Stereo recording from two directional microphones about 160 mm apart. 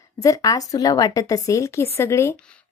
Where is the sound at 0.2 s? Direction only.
20° left (ahead or behind).